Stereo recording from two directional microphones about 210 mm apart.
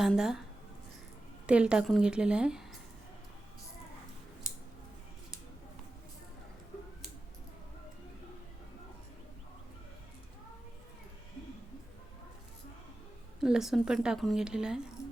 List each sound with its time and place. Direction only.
0.0 s a woman's voice: centre (ahead or behind)
1.5 s a woman's voice: 5° right (ahead or behind)
13.4 s a woman's voice: centre (ahead or behind)